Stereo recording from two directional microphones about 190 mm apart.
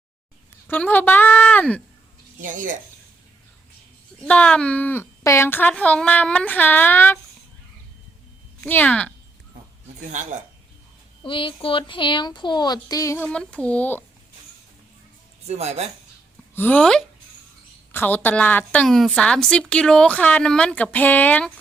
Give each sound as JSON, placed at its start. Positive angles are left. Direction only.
{"t": 0.7, "sound": "a woman's voice", "side_deg": 10}
{"t": 2.4, "sound": "speech", "side_deg": -45}
{"t": 4.2, "sound": "a woman's voice", "side_deg": 5}
{"t": 8.6, "sound": "a woman's voice", "side_deg": 10}
{"t": 10.1, "sound": "speech", "side_deg": -40}
{"t": 11.2, "sound": "speech", "side_deg": 25}
{"t": 15.4, "sound": "speech", "side_deg": -35}
{"t": 16.6, "sound": "a woman's voice", "side_deg": 10}